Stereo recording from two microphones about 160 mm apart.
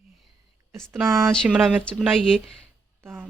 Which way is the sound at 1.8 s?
5° left (ahead or behind).